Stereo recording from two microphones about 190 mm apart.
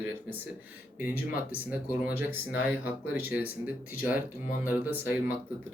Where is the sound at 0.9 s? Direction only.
10° right (ahead or behind).